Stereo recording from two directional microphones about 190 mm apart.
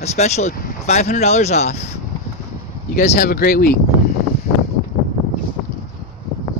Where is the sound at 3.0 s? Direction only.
45° left (ahead or behind).